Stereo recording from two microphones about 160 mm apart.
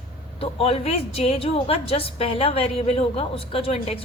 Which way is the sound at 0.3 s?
40° left (ahead or behind).